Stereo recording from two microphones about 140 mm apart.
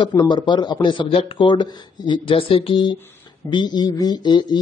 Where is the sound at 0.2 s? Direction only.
35° left (ahead or behind).